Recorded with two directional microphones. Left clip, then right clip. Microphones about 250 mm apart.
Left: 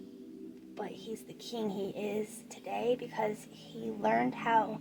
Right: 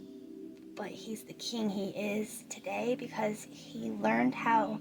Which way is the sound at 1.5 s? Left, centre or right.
Right.